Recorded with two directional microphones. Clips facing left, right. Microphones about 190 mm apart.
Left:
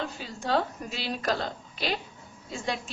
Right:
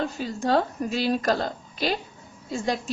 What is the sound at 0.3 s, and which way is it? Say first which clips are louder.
A woman's voice: right 4 dB; 45° right (ahead or behind).